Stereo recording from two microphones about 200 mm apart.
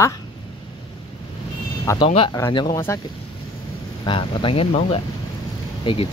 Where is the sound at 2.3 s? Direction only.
20° left (ahead or behind).